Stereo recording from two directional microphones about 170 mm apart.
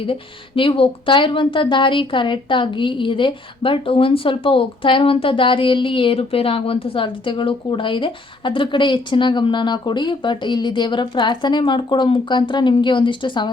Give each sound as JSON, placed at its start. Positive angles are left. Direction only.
{"t": 0.0, "sound": "speech", "side_deg": 30}